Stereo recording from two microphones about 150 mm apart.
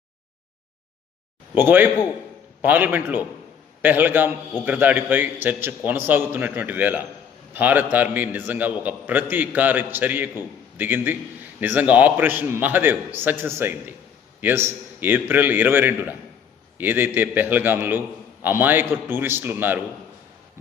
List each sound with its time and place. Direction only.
1.5 s a man's voice: 15° right (ahead or behind)